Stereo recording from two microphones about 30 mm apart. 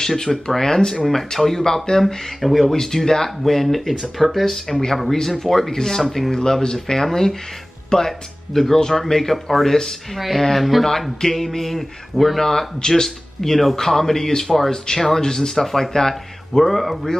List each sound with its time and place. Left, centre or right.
0.0 s speech: centre
5.1 s speech: centre
5.4 s speech: centre
5.7 s speech: centre
10.9 s speech: centre
14.7 s speech: left; by 17.1 s centre